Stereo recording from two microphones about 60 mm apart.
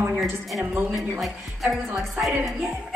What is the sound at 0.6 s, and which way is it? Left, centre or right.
Speech, right.